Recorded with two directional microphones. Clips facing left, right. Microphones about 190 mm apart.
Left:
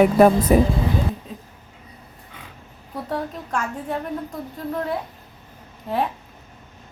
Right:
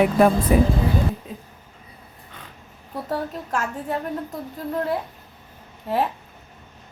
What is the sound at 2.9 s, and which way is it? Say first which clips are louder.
A woman's voice: even; 5° right (ahead or behind).